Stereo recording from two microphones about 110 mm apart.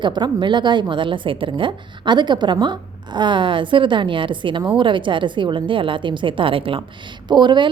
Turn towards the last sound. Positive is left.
turn(degrees=-45)  # may be behind; listen again after turning